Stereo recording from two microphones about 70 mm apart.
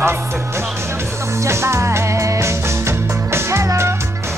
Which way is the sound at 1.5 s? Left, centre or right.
Right.